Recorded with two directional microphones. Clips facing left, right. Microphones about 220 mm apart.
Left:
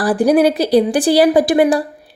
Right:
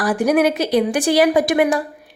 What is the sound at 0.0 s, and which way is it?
A woman's voice, 35° left (ahead or behind).